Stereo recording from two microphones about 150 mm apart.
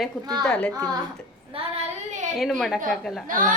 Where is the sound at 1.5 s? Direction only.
40° right (ahead or behind).